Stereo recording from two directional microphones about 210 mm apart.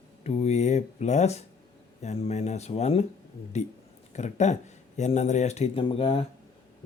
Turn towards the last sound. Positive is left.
turn(degrees=30)  # may be behind; listen again after turning